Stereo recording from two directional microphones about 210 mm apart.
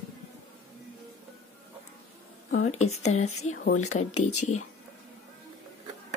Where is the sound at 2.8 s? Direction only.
30° left (ahead or behind).